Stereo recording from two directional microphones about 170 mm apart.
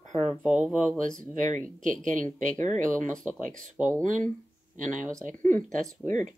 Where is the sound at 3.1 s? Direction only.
5° left (ahead or behind).